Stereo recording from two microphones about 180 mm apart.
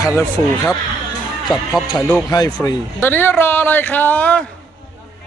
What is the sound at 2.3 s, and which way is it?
Speech, 25° left (ahead or behind).